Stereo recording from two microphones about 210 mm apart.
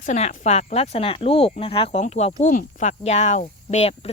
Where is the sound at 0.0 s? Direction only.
35° left (ahead or behind).